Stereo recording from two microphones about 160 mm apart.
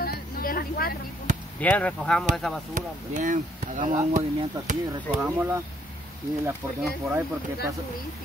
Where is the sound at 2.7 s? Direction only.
55° right (ahead or behind).